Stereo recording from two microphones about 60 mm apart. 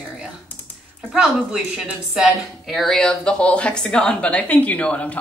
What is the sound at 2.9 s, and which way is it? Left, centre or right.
A woman's voice, centre.